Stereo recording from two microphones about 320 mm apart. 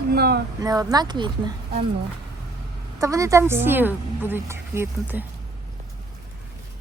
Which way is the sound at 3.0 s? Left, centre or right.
Centre.